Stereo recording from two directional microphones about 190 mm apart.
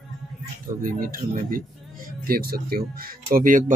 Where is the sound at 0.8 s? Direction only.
45° right (ahead or behind).